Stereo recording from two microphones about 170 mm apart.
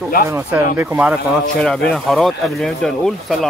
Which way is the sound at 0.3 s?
15° right (ahead or behind).